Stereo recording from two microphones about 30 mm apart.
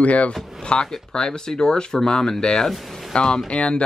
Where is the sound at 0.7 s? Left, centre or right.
Left.